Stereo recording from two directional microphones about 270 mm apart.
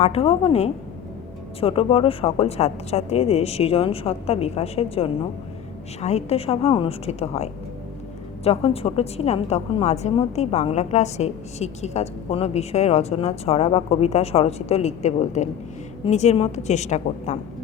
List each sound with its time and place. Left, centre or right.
0.0 s a woman's voice: left